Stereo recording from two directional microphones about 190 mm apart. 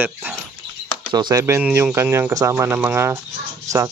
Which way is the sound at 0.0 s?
10° right (ahead or behind).